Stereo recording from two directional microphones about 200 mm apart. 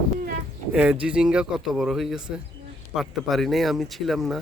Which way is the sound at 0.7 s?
5° right (ahead or behind).